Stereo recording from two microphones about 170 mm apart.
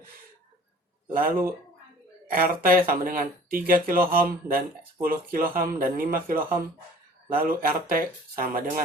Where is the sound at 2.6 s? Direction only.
60° right (ahead or behind).